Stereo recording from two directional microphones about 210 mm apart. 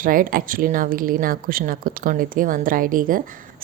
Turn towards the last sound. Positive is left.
turn(degrees=-40)  # may be behind; listen again after turning